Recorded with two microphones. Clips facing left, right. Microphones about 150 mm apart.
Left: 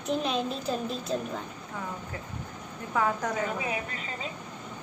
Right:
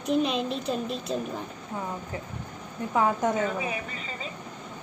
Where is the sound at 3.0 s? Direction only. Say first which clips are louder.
Right 4 dB; 25° right (ahead or behind).